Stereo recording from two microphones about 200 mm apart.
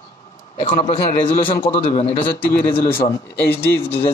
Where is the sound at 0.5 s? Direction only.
30° left (ahead or behind).